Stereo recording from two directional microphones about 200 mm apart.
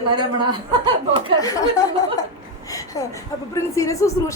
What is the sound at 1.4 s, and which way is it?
Speech, 15° left (ahead or behind).